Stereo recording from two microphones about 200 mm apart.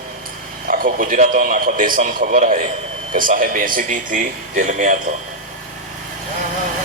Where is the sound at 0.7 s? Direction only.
45° right (ahead or behind).